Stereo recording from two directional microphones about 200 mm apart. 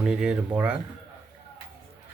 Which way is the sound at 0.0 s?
5° right (ahead or behind).